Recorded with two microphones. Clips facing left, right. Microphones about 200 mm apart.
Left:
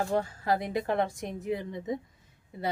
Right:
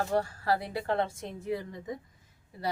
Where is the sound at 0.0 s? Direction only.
15° left (ahead or behind).